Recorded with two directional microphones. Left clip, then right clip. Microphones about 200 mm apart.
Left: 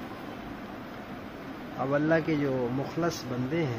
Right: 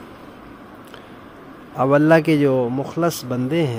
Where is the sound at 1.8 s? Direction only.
60° right (ahead or behind).